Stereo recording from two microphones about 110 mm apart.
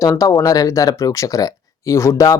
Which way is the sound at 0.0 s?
30° left (ahead or behind).